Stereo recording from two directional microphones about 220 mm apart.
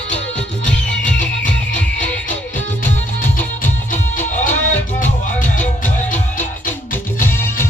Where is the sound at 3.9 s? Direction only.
35° left (ahead or behind).